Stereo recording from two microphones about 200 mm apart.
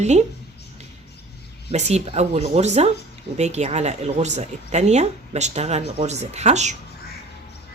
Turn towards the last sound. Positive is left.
turn(degrees=-35)  # may be behind; listen again after turning